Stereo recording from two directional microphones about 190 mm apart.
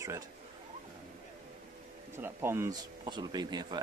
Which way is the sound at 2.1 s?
15° right (ahead or behind).